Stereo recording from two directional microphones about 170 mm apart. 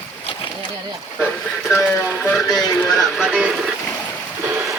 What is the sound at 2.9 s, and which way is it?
Music, centre (ahead or behind).